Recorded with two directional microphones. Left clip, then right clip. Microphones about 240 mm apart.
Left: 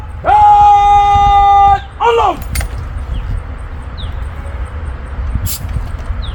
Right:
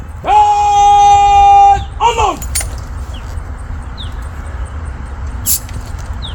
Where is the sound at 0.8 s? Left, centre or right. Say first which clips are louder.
Right 2 dB; centre.